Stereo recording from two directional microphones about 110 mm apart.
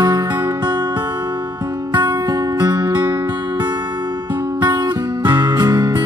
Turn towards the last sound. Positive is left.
turn(degrees=-40)  # may be behind; listen again after turning